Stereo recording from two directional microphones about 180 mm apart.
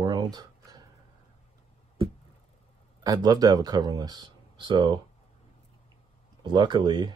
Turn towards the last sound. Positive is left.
turn(degrees=-25)  # may be behind; listen again after turning